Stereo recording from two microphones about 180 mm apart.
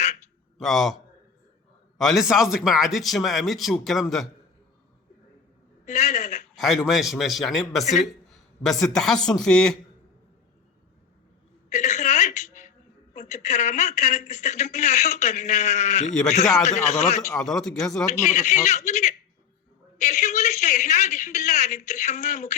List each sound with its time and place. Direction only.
0.6 s a man's voice: centre (ahead or behind)
5.8 s a woman's voice: 45° left (ahead or behind)
6.6 s a man's voice: centre (ahead or behind)
11.7 s a sound: 40° left (ahead or behind)
13.1 s speech: 40° left (ahead or behind)
17.4 s a man's voice: centre (ahead or behind)
18.1 s speech: 40° left (ahead or behind)